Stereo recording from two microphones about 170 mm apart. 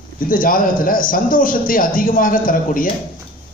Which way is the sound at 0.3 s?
55° left (ahead or behind).